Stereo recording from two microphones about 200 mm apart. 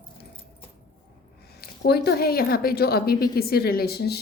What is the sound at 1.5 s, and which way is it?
Speech, 55° left (ahead or behind).